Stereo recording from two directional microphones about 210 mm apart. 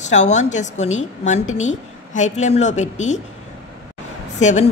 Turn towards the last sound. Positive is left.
turn(degrees=35)  # may be behind; listen again after turning